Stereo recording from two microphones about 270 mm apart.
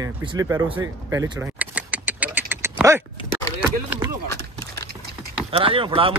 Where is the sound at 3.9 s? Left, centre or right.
Centre.